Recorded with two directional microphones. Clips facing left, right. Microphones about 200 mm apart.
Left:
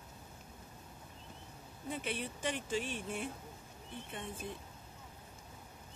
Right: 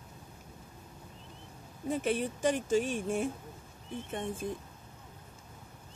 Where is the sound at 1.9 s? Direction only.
45° right (ahead or behind).